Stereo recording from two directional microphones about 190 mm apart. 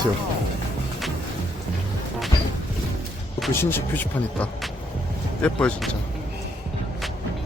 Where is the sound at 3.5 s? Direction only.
10° left (ahead or behind).